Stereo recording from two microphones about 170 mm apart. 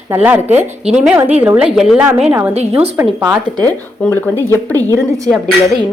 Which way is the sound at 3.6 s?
10° left (ahead or behind).